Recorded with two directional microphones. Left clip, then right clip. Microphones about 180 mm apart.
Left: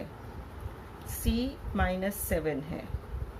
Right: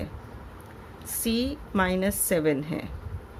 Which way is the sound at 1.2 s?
60° right (ahead or behind).